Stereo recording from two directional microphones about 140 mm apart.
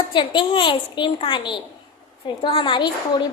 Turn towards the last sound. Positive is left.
turn(degrees=35)  # may be behind; listen again after turning